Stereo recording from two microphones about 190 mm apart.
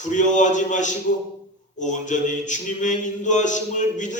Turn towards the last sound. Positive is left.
turn(degrees=40)  # may be behind; listen again after turning